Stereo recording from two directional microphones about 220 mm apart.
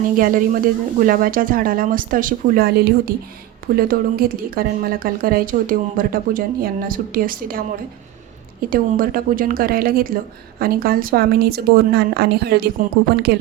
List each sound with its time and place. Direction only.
0.2 s a woman's voice: 40° right (ahead or behind)
8.7 s a woman's voice: 40° right (ahead or behind)